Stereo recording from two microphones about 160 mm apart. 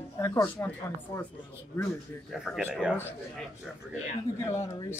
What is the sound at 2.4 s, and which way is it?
Speech, 5° right (ahead or behind).